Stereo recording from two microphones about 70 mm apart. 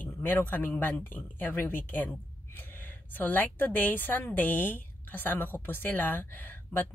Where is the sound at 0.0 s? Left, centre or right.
Left.